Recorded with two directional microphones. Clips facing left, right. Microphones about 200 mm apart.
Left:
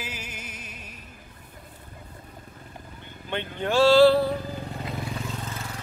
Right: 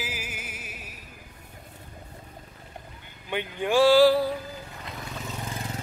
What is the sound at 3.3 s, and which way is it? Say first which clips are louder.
Speech: right 1 dB; 10° right (ahead or behind).